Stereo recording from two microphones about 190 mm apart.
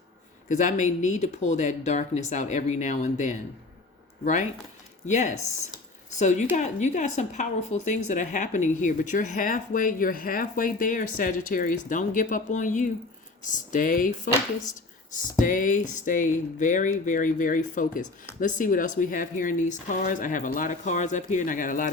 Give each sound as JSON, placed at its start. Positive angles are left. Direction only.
{"t": 0.4, "sound": "a woman's voice", "side_deg": 40}
{"t": 15.1, "sound": "a woman's voice", "side_deg": 45}